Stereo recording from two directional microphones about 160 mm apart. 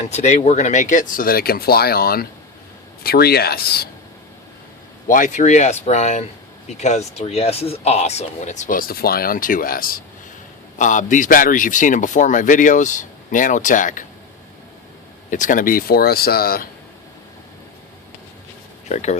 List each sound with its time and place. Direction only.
0.1 s speech: 45° left (ahead or behind); by 3.8 s 75° left (ahead or behind)
5.0 s speech: 55° left (ahead or behind)
10.8 s speech: 55° left (ahead or behind)
15.3 s speech: 55° left (ahead or behind); by 16.6 s 70° left (ahead or behind)
18.9 s speech: 45° left (ahead or behind)